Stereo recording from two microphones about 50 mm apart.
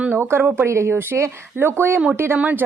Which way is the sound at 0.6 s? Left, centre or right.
Right.